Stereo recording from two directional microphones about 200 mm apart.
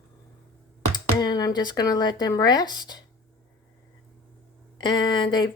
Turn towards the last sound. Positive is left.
turn(degrees=20)  # may be behind; listen again after turning